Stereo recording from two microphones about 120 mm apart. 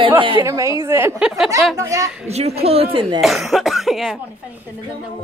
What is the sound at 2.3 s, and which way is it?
Speech, 60° right (ahead or behind).